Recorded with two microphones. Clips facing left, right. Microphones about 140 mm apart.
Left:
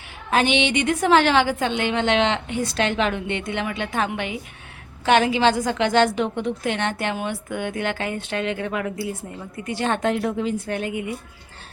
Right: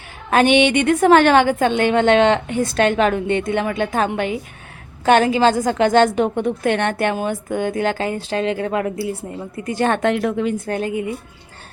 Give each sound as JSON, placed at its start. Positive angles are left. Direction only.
{"t": 0.3, "sound": "a woman's voice", "side_deg": -55}
{"t": 7.2, "sound": "speech", "side_deg": -40}
{"t": 9.8, "sound": "speech", "side_deg": -65}
{"t": 10.7, "sound": "speech", "side_deg": -35}